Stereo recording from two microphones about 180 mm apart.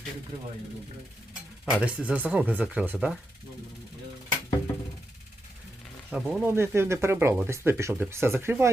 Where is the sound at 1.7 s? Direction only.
5° right (ahead or behind).